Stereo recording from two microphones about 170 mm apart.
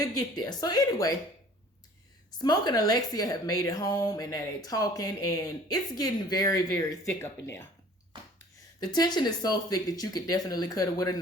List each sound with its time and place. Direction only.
0.0 s speech: 20° left (ahead or behind)
2.4 s speech: 25° left (ahead or behind)
8.8 s speech: 25° left (ahead or behind)